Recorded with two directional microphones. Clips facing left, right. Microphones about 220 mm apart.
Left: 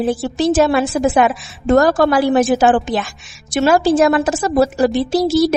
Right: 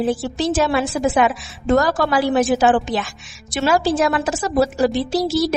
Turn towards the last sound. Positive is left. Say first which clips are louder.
# left 5 dB
turn(degrees=45)  # may be behind; listen again after turning